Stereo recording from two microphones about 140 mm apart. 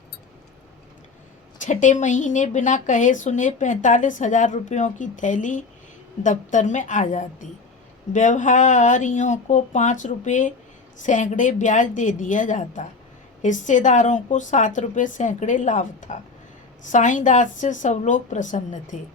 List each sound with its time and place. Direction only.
1.6 s speech: 60° left (ahead or behind)